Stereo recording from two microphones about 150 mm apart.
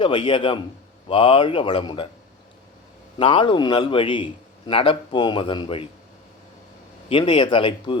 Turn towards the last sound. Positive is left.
turn(degrees=35)  # may be behind; listen again after turning